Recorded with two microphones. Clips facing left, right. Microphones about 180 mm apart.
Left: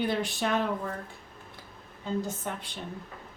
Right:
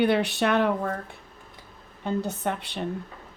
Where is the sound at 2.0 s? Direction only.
65° right (ahead or behind).